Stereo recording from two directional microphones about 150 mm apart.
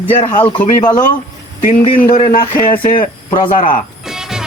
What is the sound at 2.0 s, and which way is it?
Speech, 65° left (ahead or behind).